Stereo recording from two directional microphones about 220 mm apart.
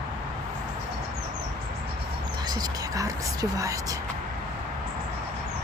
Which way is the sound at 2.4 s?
20° right (ahead or behind).